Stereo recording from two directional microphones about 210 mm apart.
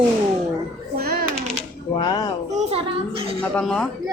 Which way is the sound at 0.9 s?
45° right (ahead or behind).